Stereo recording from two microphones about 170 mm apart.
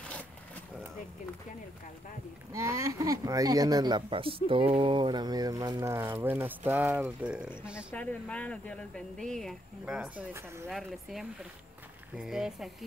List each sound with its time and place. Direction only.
2.5 s speech: 15° right (ahead or behind)
7.9 s speech: 10° left (ahead or behind); by 10.7 s 10° right (ahead or behind)
10.7 s speech: centre (ahead or behind)